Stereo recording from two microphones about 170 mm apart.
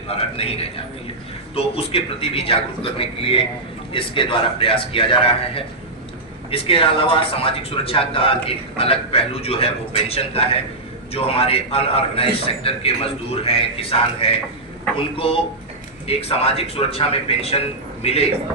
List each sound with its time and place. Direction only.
0.1 s speech: 35° left (ahead or behind)